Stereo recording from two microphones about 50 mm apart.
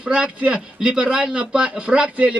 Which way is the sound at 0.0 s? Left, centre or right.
Right.